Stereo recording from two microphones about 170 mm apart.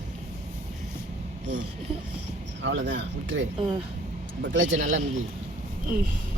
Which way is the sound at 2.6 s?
90° right.